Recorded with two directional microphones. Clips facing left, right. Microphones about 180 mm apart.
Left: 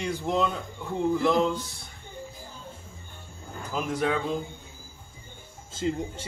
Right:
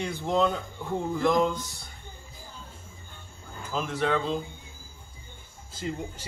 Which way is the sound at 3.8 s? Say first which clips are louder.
Left 1 dB; 15° left (ahead or behind).